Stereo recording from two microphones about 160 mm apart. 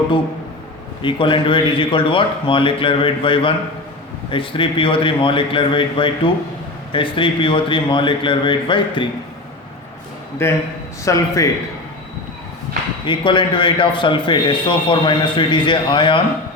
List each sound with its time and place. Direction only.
1.0 s speech: 30° left (ahead or behind)
10.4 s a man's voice: 15° left (ahead or behind)
13.1 s speech: 30° left (ahead or behind)